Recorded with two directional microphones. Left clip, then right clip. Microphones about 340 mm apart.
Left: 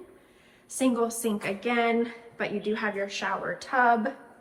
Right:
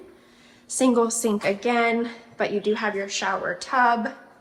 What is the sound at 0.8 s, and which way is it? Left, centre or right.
A woman's voice, centre.